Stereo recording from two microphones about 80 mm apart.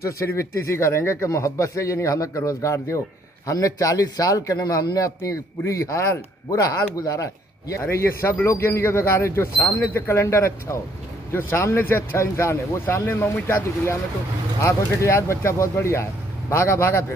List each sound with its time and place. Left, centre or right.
0.0 s speech: left
7.8 s speech: left
14.6 s speech: left